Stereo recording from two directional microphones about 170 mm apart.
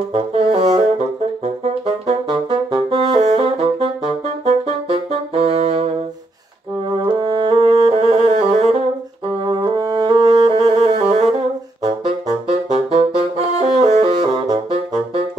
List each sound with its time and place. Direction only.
0.1 s saxophone: 35° right (ahead or behind)
5.3 s saxophone: 35° right (ahead or behind)
7.1 s saxophone: 30° right (ahead or behind)
9.5 s saxophone: 25° right (ahead or behind)
12.6 s saxophone: 40° right (ahead or behind)